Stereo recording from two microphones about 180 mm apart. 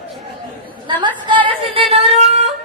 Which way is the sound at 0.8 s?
25° right (ahead or behind).